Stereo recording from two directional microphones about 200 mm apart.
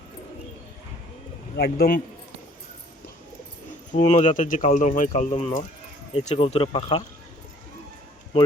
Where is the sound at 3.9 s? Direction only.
40° left (ahead or behind).